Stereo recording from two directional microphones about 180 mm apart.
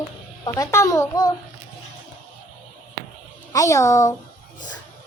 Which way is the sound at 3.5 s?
15° left (ahead or behind).